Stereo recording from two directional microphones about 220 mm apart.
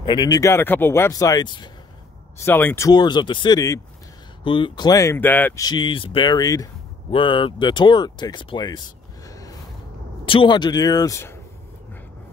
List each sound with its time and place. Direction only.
0.0 s speech: 20° left (ahead or behind)
5.7 s speech: 20° left (ahead or behind)
9.3 s a sound: 15° left (ahead or behind)
10.2 s speech: 25° left (ahead or behind)